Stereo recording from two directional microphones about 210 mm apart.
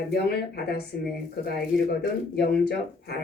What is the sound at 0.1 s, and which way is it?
Speech, 50° left (ahead or behind).